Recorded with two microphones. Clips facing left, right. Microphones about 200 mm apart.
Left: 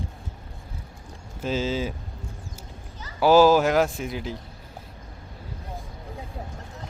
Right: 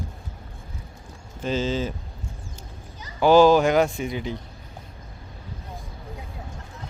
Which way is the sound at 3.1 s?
5° left (ahead or behind).